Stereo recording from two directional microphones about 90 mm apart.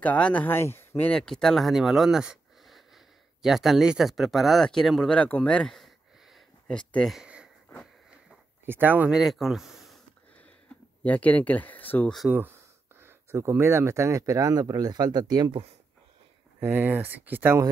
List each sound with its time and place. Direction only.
0.0 s speech: 15° left (ahead or behind)
1.0 s speech: 10° left (ahead or behind)
8.6 s speech: 20° right (ahead or behind)
9.1 s speech: centre (ahead or behind)
11.1 s speech: 15° left (ahead or behind)
12.3 s speech: 20° right (ahead or behind); by 15.5 s 50° right (ahead or behind)
16.5 s speech: 25° right (ahead or behind)